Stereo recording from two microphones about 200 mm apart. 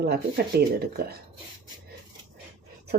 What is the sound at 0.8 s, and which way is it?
Speech, 50° right (ahead or behind).